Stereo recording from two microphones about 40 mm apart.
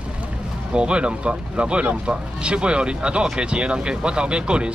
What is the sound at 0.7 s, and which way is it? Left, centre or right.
Speech, right.